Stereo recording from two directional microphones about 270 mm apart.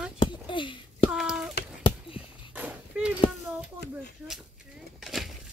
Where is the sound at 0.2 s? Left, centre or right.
Centre.